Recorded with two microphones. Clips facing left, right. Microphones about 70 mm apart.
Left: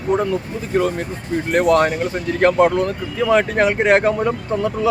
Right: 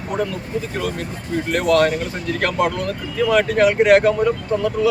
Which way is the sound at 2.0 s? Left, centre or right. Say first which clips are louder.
Left 5 dB; left.